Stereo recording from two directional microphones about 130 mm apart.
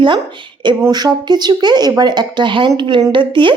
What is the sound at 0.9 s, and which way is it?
Speech, 30° right (ahead or behind).